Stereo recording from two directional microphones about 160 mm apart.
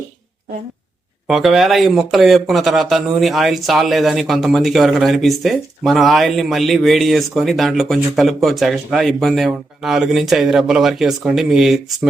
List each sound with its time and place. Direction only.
1.3 s speech: centre (ahead or behind)